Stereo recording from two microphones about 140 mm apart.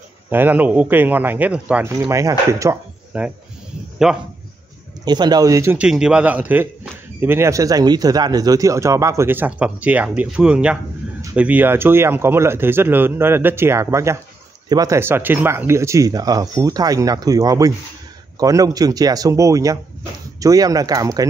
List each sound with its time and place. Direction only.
0.3 s a man's voice: 15° right (ahead or behind)
1.9 s speech: 20° right (ahead or behind)
3.1 s a man's voice: 10° right (ahead or behind)
5.0 s speech: 30° right (ahead or behind)
5.8 s a man's voice: 5° right (ahead or behind); by 21.3 s 25° right (ahead or behind)